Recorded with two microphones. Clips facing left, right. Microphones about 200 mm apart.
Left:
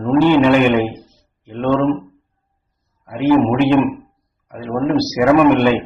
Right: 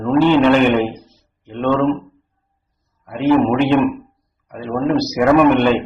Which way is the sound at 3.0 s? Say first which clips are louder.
Left 1 dB; 5° left (ahead or behind).